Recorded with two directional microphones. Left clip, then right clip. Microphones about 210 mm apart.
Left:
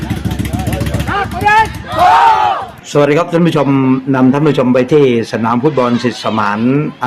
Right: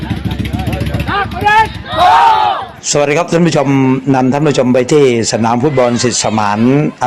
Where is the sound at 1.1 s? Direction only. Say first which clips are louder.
Even; centre (ahead or behind).